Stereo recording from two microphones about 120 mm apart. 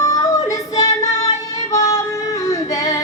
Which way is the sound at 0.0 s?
25° left (ahead or behind).